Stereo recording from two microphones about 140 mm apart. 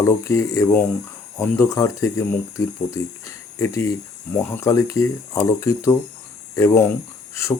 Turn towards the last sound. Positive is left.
turn(degrees=20)  # may be behind; listen again after turning